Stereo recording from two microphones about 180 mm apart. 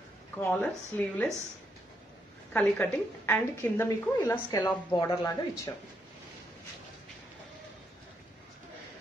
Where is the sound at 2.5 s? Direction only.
10° left (ahead or behind).